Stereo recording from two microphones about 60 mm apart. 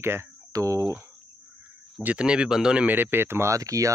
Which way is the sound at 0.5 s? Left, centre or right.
Right.